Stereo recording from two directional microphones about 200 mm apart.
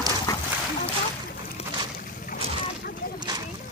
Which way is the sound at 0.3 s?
20° left (ahead or behind).